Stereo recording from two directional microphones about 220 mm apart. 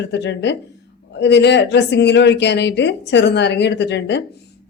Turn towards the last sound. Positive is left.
turn(degrees=50)  # may be behind; listen again after turning